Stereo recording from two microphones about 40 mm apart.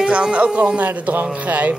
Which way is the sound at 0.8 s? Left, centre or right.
Right.